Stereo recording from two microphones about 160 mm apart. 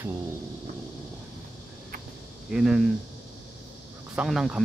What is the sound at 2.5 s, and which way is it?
Speech, 5° right (ahead or behind).